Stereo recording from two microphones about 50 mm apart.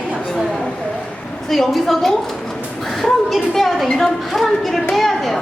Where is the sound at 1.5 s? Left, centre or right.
Centre.